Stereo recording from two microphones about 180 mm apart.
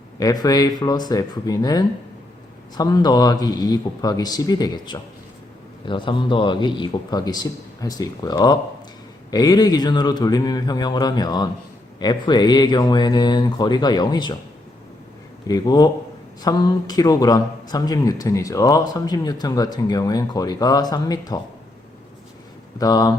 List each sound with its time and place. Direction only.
0.2 s speech: 20° left (ahead or behind)
15.4 s speech: 20° left (ahead or behind)
22.8 s speech: 20° left (ahead or behind)